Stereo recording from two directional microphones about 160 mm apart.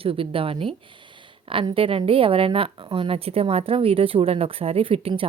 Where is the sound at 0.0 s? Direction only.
35° right (ahead or behind).